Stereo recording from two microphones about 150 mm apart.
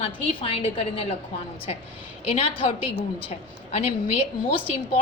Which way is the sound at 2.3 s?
40° left (ahead or behind).